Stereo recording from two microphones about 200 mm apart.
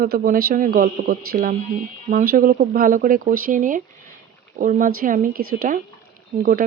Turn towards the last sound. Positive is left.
turn(degrees=-45)  # may be behind; listen again after turning